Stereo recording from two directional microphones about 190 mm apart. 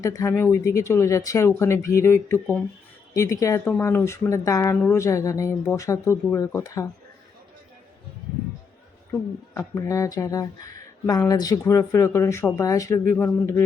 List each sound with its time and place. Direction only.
0.0 s speech: 15° left (ahead or behind)
9.6 s speech: 15° left (ahead or behind)